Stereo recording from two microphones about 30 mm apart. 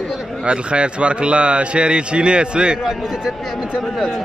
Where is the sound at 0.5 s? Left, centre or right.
Right.